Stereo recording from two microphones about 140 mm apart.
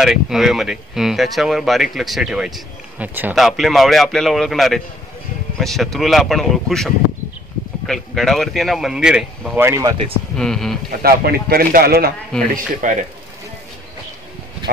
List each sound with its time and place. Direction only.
0.0 s speech: 5° right (ahead or behind)
3.3 s speech: centre (ahead or behind)
9.6 s speech: 20° right (ahead or behind)
10.3 s speech: 5° left (ahead or behind)
11.0 s speech: 90° right
12.3 s speech: 5° left (ahead or behind)
12.8 s speech: 65° right (ahead or behind)